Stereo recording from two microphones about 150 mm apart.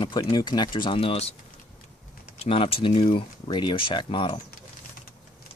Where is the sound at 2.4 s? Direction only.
40° left (ahead or behind).